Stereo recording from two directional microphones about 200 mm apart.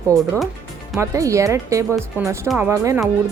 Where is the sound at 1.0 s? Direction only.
15° right (ahead or behind).